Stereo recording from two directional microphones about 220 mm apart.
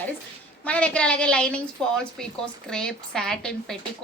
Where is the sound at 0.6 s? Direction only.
5° left (ahead or behind).